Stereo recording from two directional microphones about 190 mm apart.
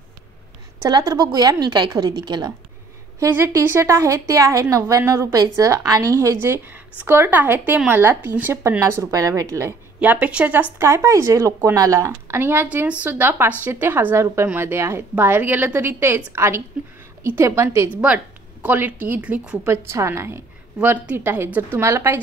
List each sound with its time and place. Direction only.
0.8 s a woman's voice: 20° right (ahead or behind)
3.2 s speech: 10° right (ahead or behind)